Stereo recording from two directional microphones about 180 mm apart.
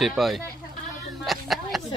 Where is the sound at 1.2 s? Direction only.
Centre (ahead or behind).